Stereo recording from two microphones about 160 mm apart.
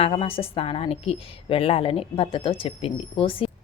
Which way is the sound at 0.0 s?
35° left (ahead or behind).